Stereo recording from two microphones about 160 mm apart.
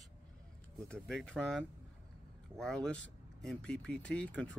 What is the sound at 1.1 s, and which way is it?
Speech, 5° left (ahead or behind).